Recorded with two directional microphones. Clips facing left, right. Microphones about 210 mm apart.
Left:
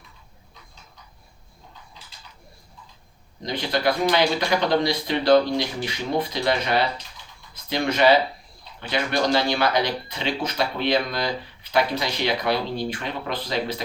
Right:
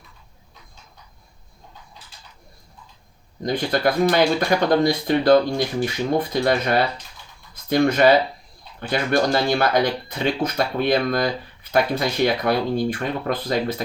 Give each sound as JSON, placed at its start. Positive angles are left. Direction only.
{"t": 3.4, "sound": "speech", "side_deg": -50}